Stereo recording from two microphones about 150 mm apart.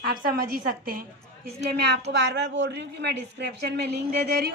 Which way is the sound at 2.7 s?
90° right.